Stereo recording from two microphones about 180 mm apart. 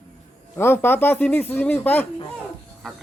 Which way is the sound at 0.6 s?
10° left (ahead or behind).